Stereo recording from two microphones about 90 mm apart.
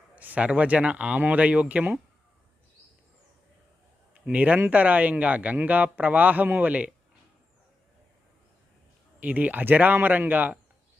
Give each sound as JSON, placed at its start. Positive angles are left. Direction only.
{"t": 0.2, "sound": "a man's voice", "side_deg": -15}
{"t": 4.3, "sound": "a man's voice", "side_deg": -15}
{"t": 9.2, "sound": "speech", "side_deg": -20}